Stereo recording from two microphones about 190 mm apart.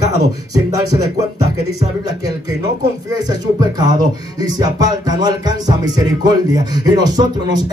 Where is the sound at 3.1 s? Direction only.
20° right (ahead or behind).